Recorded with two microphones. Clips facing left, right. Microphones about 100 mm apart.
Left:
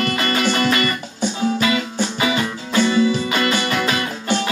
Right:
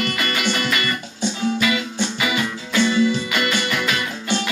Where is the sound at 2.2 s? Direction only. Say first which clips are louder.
Left 4 dB; 35° left (ahead or behind).